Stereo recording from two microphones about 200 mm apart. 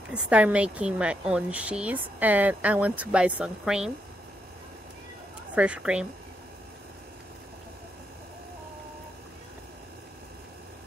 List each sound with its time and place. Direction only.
0.1 s a woman's voice: 5° right (ahead or behind)
5.5 s speech: 5° right (ahead or behind)